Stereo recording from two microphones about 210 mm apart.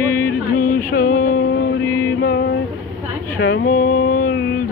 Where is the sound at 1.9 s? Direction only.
15° left (ahead or behind).